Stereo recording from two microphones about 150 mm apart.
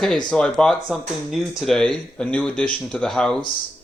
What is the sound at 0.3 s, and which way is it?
Speech, 5° left (ahead or behind).